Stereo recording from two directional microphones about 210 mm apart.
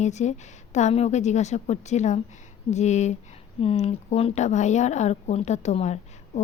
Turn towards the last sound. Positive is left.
turn(degrees=30)  # may be behind; listen again after turning